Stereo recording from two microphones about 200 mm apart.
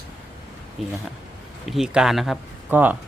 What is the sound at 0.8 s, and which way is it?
Speech, centre (ahead or behind).